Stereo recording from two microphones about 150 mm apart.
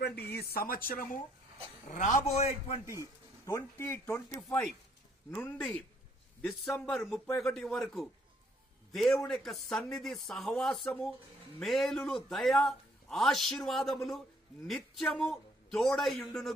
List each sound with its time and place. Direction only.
0.0 s a man's voice: 90° left; by 2.8 s 45° left (ahead or behind)
2.8 s speech: 20° right (ahead or behind)
3.4 s a man's voice: 15° left (ahead or behind); by 16.5 s centre (ahead or behind)